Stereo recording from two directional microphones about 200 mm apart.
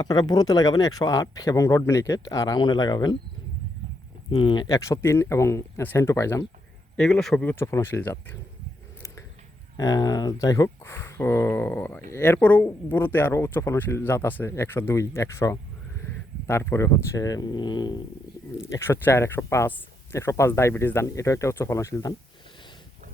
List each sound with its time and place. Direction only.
0.0 s speech: 20° left (ahead or behind)
4.3 s speech: 25° left (ahead or behind)
6.9 s speech: centre (ahead or behind)
9.7 s speech: 20° left (ahead or behind)